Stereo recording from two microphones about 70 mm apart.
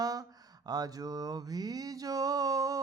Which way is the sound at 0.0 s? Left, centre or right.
Right.